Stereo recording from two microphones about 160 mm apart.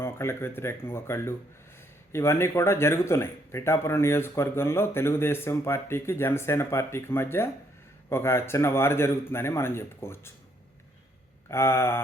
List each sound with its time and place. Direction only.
0.0 s speech: 15° left (ahead or behind)
11.4 s speech: 15° left (ahead or behind)